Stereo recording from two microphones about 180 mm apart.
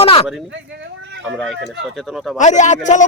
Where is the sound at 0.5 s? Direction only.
85° right.